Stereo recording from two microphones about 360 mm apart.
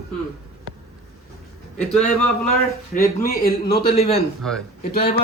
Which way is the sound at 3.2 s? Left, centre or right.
Left.